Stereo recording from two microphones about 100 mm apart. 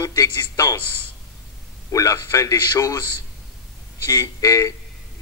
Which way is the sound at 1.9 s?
35° left (ahead or behind).